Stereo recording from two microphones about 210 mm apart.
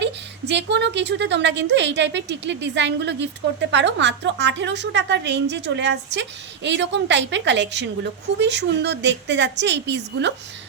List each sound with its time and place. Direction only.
0.0 s a woman's voice: 55° right (ahead or behind)